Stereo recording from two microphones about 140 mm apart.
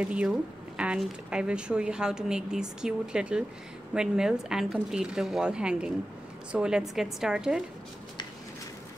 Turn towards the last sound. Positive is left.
turn(degrees=-5)  # may be behind; listen again after turning